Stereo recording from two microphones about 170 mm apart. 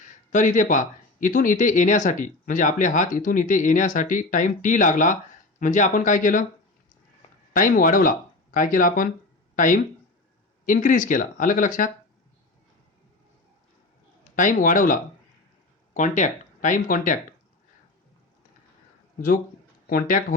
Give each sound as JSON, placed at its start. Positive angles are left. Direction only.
{"t": 0.3, "sound": "speech", "side_deg": 50}
{"t": 7.5, "sound": "speech", "side_deg": 55}
{"t": 14.3, "sound": "speech", "side_deg": 50}
{"t": 16.0, "sound": "speech", "side_deg": 45}
{"t": 19.9, "sound": "speech", "side_deg": 55}